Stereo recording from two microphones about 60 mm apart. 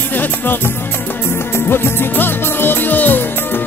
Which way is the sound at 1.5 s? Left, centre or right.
Left.